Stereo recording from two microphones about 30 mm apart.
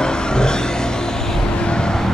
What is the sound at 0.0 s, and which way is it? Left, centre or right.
Vehicle, left.